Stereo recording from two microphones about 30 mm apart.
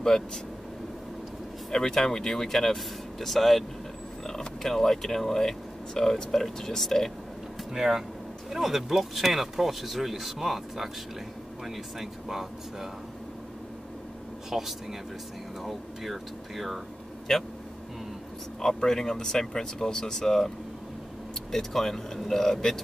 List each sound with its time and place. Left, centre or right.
1.7 s speech: centre
4.2 s speech: centre
7.7 s speech: centre
14.5 s speech: centre
17.3 s speech: centre
18.6 s speech: centre